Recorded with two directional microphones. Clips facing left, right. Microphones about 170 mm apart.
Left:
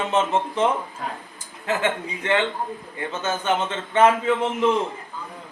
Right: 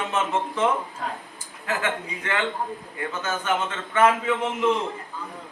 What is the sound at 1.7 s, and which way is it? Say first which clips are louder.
A man's voice: left 4 dB; 20° left (ahead or behind).